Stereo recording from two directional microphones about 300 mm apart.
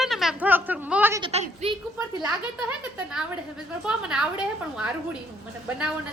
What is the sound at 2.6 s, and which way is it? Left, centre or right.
A woman's voice, centre.